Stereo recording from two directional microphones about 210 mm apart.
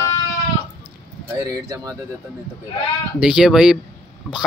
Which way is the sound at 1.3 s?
15° right (ahead or behind).